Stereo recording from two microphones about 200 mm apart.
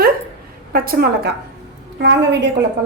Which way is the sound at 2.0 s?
60° right (ahead or behind).